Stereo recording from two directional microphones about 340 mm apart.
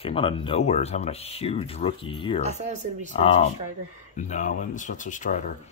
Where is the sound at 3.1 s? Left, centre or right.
Centre.